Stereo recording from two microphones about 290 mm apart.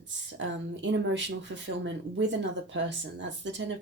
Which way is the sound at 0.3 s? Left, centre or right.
Right.